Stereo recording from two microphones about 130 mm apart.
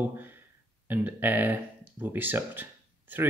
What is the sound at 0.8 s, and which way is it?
Speech, 15° right (ahead or behind).